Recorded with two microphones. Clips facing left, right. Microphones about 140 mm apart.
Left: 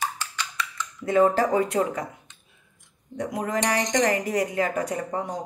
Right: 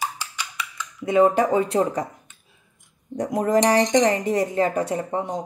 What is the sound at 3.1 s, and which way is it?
Speech, 40° right (ahead or behind).